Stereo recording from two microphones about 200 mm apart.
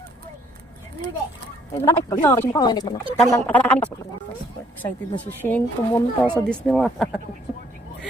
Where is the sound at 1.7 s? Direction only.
15° left (ahead or behind).